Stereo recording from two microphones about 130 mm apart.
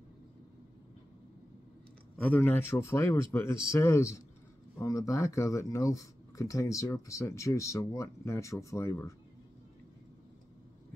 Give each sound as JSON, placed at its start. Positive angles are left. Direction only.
{"t": 2.1, "sound": "speech", "side_deg": 10}